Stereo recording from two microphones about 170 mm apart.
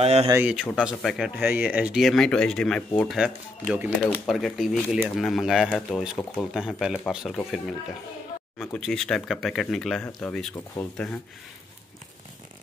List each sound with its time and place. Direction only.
0.0 s speech: 35° right (ahead or behind)
0.3 s speech: 10° right (ahead or behind)